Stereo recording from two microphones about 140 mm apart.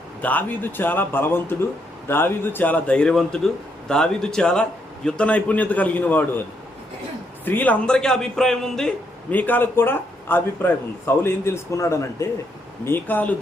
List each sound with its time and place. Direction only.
0.2 s speech: 10° left (ahead or behind)
7.4 s a man's voice: 15° left (ahead or behind)